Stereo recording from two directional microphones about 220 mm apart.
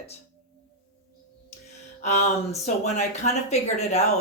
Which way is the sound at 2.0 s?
30° left (ahead or behind).